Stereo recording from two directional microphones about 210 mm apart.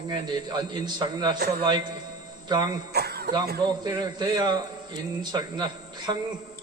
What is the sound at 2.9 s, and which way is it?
Cough, 50° right (ahead or behind).